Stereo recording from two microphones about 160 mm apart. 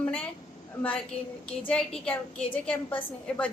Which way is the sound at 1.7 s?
5° left (ahead or behind).